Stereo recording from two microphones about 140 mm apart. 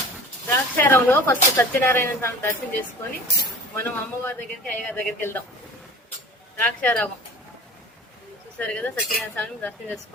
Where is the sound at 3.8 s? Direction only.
15° left (ahead or behind).